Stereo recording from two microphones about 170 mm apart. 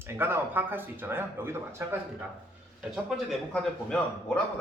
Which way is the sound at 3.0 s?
5° left (ahead or behind).